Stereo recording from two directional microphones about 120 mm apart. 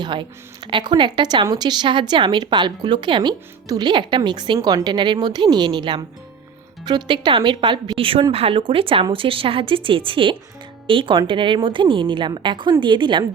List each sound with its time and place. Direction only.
0.0 s a woman's voice: 40° right (ahead or behind)